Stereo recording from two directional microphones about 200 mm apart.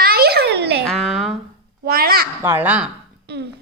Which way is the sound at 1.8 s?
50° right (ahead or behind).